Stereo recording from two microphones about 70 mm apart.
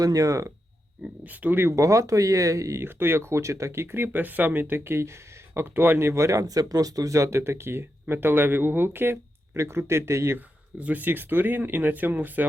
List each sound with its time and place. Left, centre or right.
0.0 s speech: right
1.0 s speech: right
1.7 s speech: right
2.8 s speech: right
10.3 s speech: right